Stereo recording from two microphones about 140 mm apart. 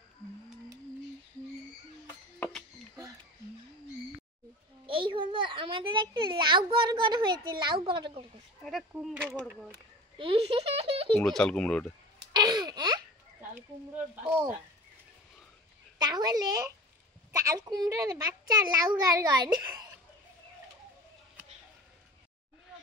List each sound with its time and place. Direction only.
4.8 s a child's voice: 40° right (ahead or behind)
8.6 s speech: centre (ahead or behind)
10.1 s a sound: 40° right (ahead or behind)
11.2 s speech: 5° left (ahead or behind)
12.3 s wail: 30° right (ahead or behind)
13.6 s speech: 15° right (ahead or behind)
16.0 s a child's voice: 30° right (ahead or behind)